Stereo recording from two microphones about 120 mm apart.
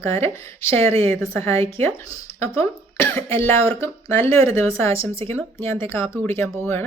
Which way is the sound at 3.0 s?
20° left (ahead or behind).